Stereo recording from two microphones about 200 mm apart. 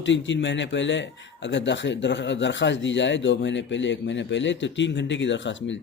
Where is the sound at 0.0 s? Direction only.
65° left (ahead or behind).